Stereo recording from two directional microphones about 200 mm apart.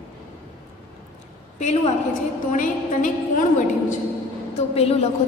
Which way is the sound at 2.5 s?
40° left (ahead or behind).